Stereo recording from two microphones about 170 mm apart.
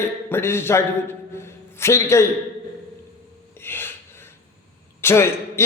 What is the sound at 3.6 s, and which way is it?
Gasp, 15° left (ahead or behind).